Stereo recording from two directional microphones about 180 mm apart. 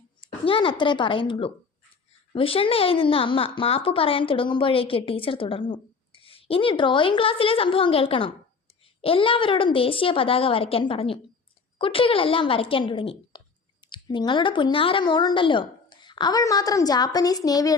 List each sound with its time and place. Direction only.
0.2 s a woman's voice: 30° left (ahead or behind)